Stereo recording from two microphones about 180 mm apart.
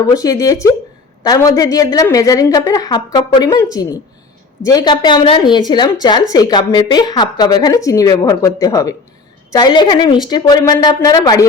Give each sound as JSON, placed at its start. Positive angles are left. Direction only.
{"t": 0.0, "sound": "a woman's voice", "side_deg": 20}